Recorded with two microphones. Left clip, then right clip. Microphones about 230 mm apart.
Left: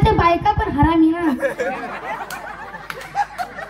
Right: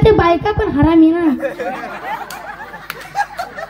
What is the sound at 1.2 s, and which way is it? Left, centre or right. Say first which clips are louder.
Speech: right 2 dB; left.